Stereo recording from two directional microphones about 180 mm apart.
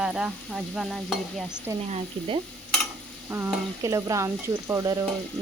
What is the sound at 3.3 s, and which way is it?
Stir, 15° right (ahead or behind).